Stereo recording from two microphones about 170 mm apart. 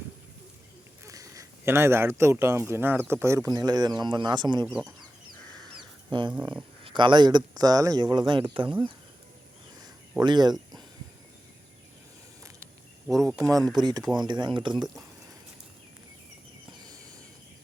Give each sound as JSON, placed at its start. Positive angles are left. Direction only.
{"t": 1.0, "sound": "a man's voice", "side_deg": -20}
{"t": 4.6, "sound": "speech", "side_deg": -5}
{"t": 6.1, "sound": "speech", "side_deg": -25}
{"t": 9.8, "sound": "a sound", "side_deg": -25}
{"t": 13.1, "sound": "speech", "side_deg": 0}
{"t": 13.4, "sound": "speech", "side_deg": -20}